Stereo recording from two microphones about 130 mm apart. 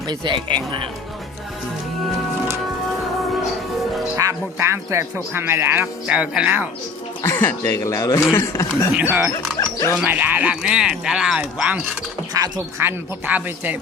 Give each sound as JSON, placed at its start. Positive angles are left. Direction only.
{"t": 0.1, "sound": "speech", "side_deg": -40}
{"t": 4.2, "sound": "speech", "side_deg": -20}
{"t": 7.2, "sound": "speech", "side_deg": 20}
{"t": 9.0, "sound": "speech", "side_deg": -15}
{"t": 9.6, "sound": "dog", "side_deg": 25}
{"t": 10.0, "sound": "speech", "side_deg": -10}
{"t": 12.3, "sound": "speech", "side_deg": -25}
{"t": 13.2, "sound": "speech", "side_deg": -15}